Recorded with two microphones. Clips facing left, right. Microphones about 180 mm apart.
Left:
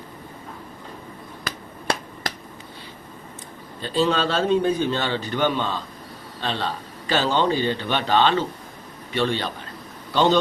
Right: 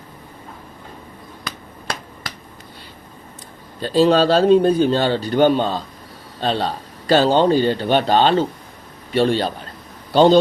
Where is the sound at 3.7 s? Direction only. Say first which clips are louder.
Right 7 dB; 35° right (ahead or behind).